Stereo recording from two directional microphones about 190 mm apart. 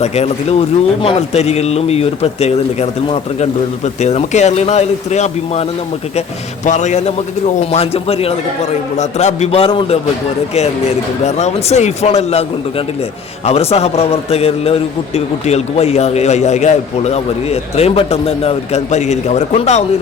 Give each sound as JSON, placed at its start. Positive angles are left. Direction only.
{"t": 0.0, "sound": "a man's voice", "side_deg": 35}
{"t": 6.7, "sound": "a man's voice", "side_deg": 40}
{"t": 11.3, "sound": "a man's voice", "side_deg": 35}